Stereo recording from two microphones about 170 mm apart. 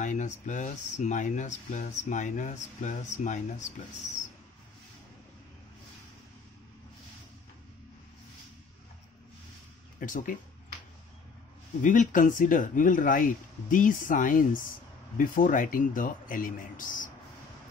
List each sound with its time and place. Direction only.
0.0 s speech: 45° left (ahead or behind)
9.9 s speech: 50° left (ahead or behind)
11.8 s speech: 50° left (ahead or behind)